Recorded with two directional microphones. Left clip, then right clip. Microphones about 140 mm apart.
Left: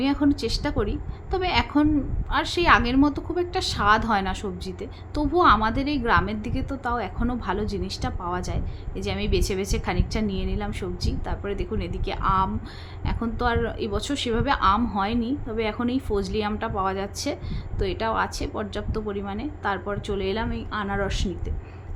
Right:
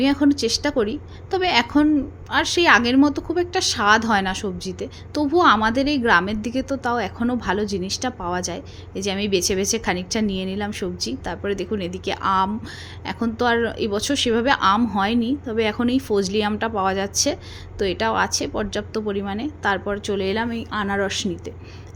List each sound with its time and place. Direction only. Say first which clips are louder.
0.0 s a woman's voice: right 4 dB; 35° right (ahead or behind)